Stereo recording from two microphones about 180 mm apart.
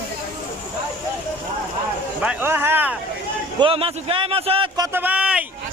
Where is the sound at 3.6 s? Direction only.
30° right (ahead or behind); by 5.4 s 5° right (ahead or behind).